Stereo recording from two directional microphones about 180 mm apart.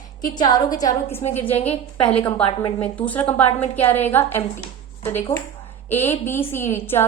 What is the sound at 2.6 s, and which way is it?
A woman's voice, 10° left (ahead or behind).